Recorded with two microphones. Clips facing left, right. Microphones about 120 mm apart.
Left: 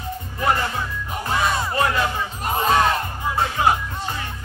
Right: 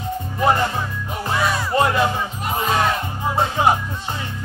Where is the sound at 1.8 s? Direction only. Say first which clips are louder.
Right 4 dB; 25° right (ahead or behind).